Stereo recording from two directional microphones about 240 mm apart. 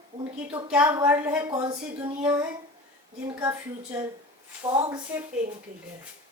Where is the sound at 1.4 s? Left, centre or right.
Centre.